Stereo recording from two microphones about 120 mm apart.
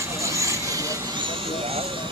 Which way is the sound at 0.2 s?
25° right (ahead or behind).